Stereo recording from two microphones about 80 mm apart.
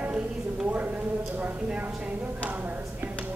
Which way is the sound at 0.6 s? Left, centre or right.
Centre.